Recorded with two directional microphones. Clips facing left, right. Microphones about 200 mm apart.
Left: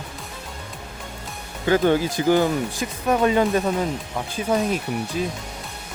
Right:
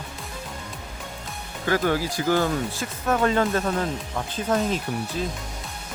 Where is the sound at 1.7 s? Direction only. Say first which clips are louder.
Left 5 dB; 20° left (ahead or behind).